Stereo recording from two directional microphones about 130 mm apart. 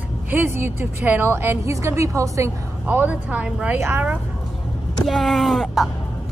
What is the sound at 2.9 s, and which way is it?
A woman's voice, 15° right (ahead or behind).